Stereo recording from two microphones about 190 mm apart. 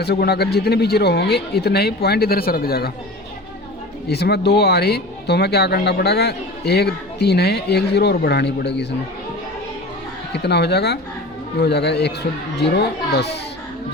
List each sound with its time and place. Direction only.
0.0 s speech: 60° left (ahead or behind)
4.1 s speech: 60° left (ahead or behind)
10.3 s speech: 60° left (ahead or behind)